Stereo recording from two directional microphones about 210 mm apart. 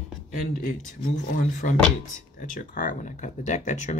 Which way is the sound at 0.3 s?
40° left (ahead or behind).